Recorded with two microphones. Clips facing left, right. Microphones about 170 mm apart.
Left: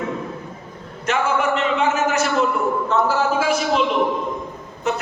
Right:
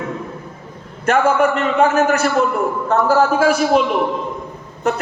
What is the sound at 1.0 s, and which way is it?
A man's voice, 55° right (ahead or behind).